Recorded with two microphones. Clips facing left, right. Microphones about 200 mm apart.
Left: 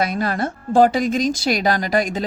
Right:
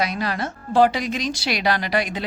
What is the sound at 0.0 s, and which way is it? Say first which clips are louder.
Speech: left 3 dB; 50° left (ahead or behind).